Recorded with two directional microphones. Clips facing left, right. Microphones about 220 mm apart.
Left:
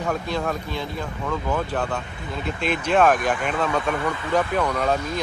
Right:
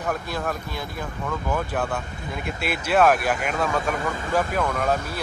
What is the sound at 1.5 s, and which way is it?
Speech, 10° right (ahead or behind).